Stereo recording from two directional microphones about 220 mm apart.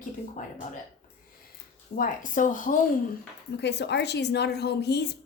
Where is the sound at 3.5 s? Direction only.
50° left (ahead or behind).